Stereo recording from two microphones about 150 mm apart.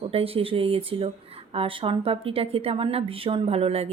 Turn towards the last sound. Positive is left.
turn(degrees=-45)  # may be behind; listen again after turning